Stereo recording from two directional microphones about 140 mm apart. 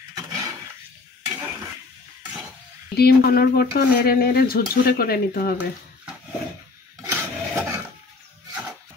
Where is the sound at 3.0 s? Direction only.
90° left.